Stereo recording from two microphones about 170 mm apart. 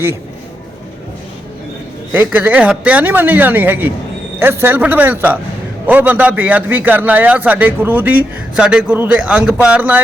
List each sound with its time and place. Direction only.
2.1 s a man's voice: 10° right (ahead or behind)